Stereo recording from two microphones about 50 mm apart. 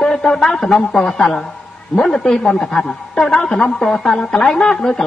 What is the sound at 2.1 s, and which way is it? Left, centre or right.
A man's voice, left.